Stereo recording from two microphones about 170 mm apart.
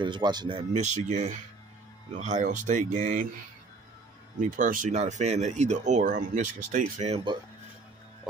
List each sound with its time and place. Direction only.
0.0 s speech: 25° right (ahead or behind); by 3.3 s 45° right (ahead or behind)
4.4 s speech: 50° right (ahead or behind)